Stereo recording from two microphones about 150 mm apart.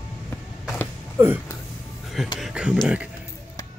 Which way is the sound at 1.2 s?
15° right (ahead or behind).